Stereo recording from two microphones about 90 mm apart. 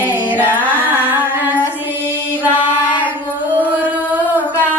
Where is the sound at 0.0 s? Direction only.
20° right (ahead or behind).